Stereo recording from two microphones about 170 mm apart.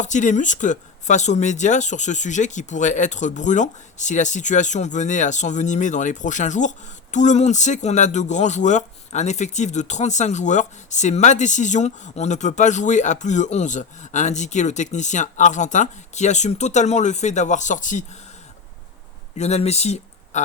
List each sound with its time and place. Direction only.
0.0 s speech: 45° left (ahead or behind)
19.4 s speech: 40° left (ahead or behind)